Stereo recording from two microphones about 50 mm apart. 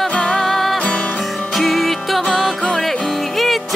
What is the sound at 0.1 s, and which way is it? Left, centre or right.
Music, left.